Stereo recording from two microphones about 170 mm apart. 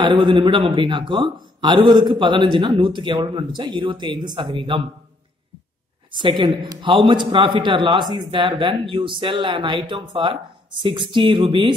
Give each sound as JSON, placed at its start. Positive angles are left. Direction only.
{"t": 0.0, "sound": "a man's voice", "side_deg": -25}
{"t": 6.1, "sound": "a man's voice", "side_deg": -30}